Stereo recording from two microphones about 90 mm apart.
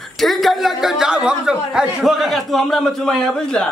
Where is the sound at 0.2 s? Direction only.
Centre (ahead or behind).